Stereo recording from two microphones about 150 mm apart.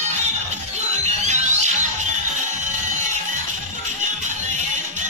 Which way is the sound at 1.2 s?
50° right (ahead or behind).